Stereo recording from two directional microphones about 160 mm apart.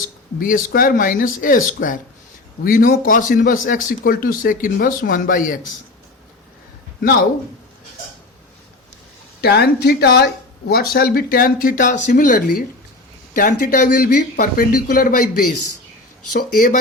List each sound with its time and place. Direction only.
0.3 s a man's voice: 60° left (ahead or behind)
9.4 s a man's voice: 85° left; by 16.7 s 60° left (ahead or behind)